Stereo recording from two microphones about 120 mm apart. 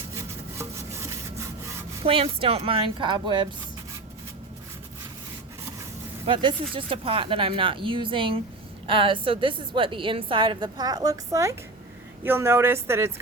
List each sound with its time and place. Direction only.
0.6 s rub: 25° right (ahead or behind)
2.0 s a woman's voice: 50° right (ahead or behind)
6.2 s a woman's voice: 45° right (ahead or behind); by 13.1 s 20° right (ahead or behind)